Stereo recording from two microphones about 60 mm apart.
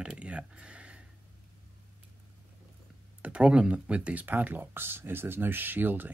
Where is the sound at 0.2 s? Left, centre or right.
Centre.